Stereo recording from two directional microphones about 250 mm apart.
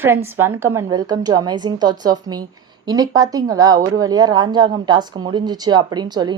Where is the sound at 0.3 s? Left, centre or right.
Centre.